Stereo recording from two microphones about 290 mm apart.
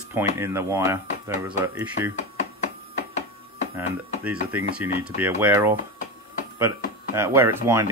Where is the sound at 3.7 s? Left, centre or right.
Centre.